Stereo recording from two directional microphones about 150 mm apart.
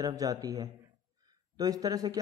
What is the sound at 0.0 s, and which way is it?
A man's voice, 25° right (ahead or behind).